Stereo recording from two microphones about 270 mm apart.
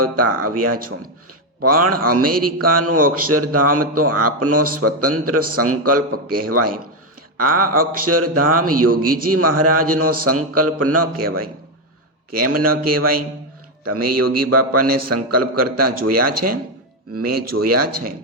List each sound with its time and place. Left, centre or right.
0.0 s a man's voice: right
7.7 s speech: right
8.0 s a man's voice: right
12.8 s a man's voice: right